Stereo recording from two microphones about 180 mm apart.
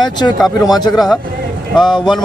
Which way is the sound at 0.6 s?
20° left (ahead or behind).